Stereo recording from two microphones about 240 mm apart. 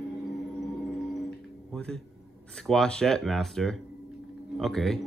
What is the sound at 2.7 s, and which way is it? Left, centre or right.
Speech, centre.